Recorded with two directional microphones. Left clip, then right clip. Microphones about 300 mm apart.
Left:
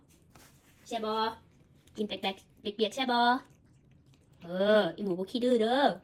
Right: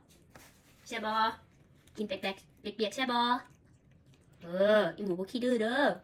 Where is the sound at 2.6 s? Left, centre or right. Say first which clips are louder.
Left 3 dB; centre.